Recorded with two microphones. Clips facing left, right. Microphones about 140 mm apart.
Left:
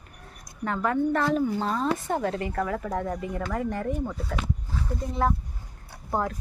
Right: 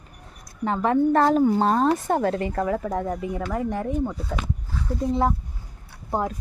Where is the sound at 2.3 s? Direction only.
30° right (ahead or behind).